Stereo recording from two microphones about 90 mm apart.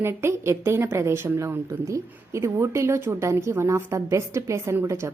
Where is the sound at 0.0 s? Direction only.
25° right (ahead or behind).